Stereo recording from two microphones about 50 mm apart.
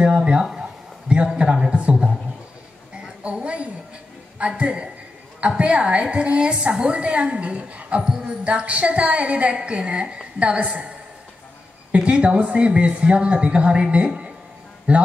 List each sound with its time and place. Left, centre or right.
0.0 s speech: right
0.5 s a sound: centre
4.4 s a woman's voice: right
8.0 s speech: centre
8.5 s a woman's voice: right
11.9 s a woman's voice: right